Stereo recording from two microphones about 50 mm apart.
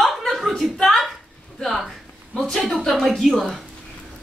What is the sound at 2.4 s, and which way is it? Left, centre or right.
A woman's voice, centre.